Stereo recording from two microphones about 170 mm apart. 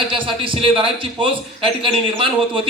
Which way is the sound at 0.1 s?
30° right (ahead or behind).